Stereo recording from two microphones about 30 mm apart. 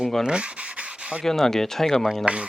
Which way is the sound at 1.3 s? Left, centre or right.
Centre.